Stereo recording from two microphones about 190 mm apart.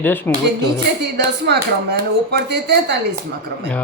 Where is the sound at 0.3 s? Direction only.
10° left (ahead or behind).